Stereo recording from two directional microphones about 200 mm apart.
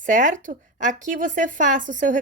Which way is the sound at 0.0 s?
40° right (ahead or behind).